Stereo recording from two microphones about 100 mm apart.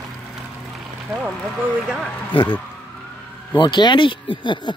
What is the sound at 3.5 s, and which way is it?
Speech, 50° left (ahead or behind).